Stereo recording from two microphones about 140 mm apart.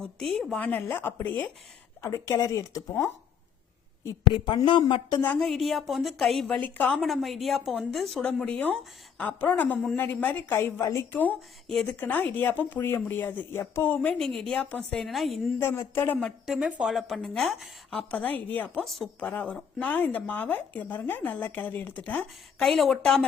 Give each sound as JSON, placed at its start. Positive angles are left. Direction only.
{"t": 0.0, "sound": "speech", "side_deg": 5}
{"t": 4.0, "sound": "a woman's voice", "side_deg": 30}
{"t": 5.2, "sound": "speech", "side_deg": 10}
{"t": 5.5, "sound": "a woman's voice", "side_deg": 0}
{"t": 15.5, "sound": "speech", "side_deg": 15}
{"t": 16.5, "sound": "a woman's voice", "side_deg": -5}